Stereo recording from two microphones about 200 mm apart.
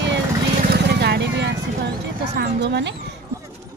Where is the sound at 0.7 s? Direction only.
55° right (ahead or behind).